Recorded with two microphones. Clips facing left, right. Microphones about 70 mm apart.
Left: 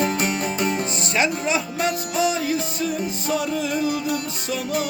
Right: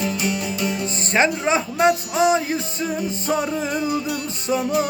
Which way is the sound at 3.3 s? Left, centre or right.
Right.